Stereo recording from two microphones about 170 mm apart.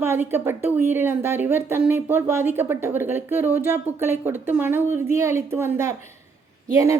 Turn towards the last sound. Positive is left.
turn(degrees=-15)  # may be behind; listen again after turning